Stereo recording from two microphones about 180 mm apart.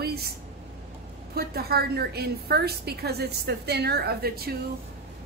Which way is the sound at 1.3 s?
60° right (ahead or behind).